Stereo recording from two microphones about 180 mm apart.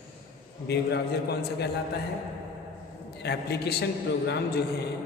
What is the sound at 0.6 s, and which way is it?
A man's voice, 65° left (ahead or behind).